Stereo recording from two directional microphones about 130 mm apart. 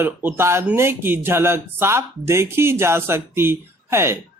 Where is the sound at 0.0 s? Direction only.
15° right (ahead or behind).